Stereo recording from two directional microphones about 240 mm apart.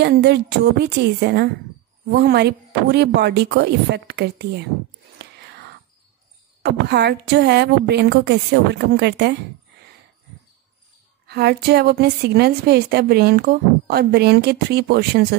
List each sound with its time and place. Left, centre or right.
0.0 s a woman's voice: right
5.2 s whispering: right
6.6 s a woman's voice: right
11.2 s a woman's voice: right